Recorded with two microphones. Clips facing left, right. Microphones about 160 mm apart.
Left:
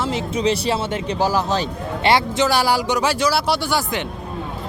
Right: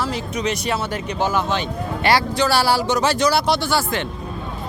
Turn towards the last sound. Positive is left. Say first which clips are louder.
# right 1 dB
turn(degrees=15)  # may be behind; listen again after turning